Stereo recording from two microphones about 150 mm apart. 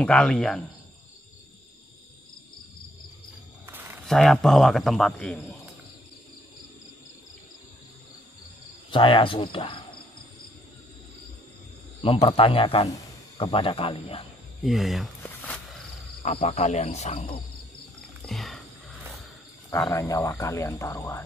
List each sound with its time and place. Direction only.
0.0 s speech: 5° left (ahead or behind)
3.6 s a sound: 15° right (ahead or behind)
4.0 s speech: centre (ahead or behind)
8.9 s cricket: 35° left (ahead or behind)
12.2 s cricket: 35° left (ahead or behind)
14.6 s speech: centre (ahead or behind)
15.2 s walk: 10° left (ahead or behind)
16.2 s cricket: 40° left (ahead or behind)
18.2 s wild animals: centre (ahead or behind)
19.9 s speech: 20° left (ahead or behind)